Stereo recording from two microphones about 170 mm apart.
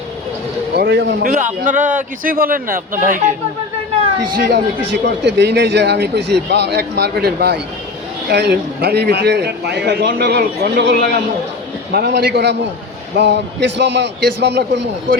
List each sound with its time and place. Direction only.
0.8 s speech: 85° right
1.2 s a man's voice: 50° right (ahead or behind)
4.2 s speech: 60° right (ahead or behind)
5.0 s a man's voice: 85° right
13.1 s a man's voice: 90° right